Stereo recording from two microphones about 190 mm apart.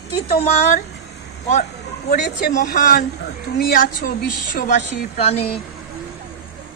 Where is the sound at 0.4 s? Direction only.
35° left (ahead or behind).